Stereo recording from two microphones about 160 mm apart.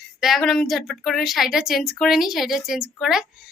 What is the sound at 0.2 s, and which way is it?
Speech, centre (ahead or behind).